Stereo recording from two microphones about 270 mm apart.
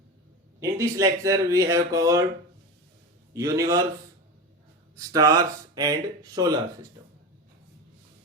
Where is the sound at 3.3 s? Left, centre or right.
Centre.